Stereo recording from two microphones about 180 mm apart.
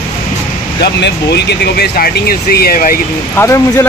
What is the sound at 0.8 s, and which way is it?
Speech, 70° left (ahead or behind).